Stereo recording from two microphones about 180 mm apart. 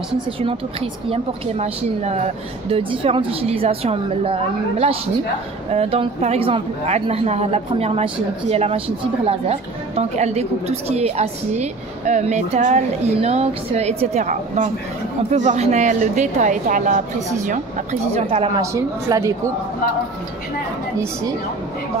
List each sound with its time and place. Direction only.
0.4 s a woman's voice: 30° right (ahead or behind); by 17.0 s 45° right (ahead or behind)
18.0 s a woman's voice: 35° right (ahead or behind)
18.6 s a woman's voice: 15° right (ahead or behind)